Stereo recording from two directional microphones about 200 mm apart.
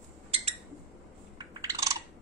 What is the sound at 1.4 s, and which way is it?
Chewing, 20° right (ahead or behind).